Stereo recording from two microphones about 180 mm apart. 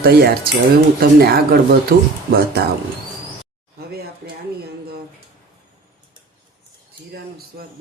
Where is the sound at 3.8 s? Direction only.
60° right (ahead or behind).